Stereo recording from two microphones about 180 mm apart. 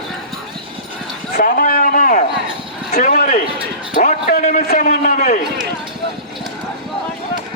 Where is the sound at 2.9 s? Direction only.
50° left (ahead or behind).